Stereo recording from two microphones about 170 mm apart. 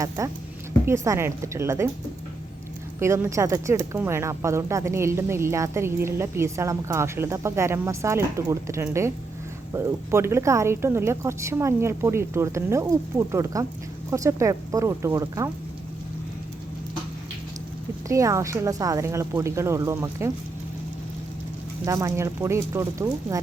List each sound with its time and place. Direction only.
0.2 s speech: 20° right (ahead or behind)
3.0 s speech: 15° right (ahead or behind)
18.1 s speech: 20° right (ahead or behind)
21.8 s speech: 20° right (ahead or behind)